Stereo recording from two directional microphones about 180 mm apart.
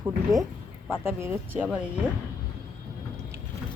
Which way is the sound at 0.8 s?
10° right (ahead or behind).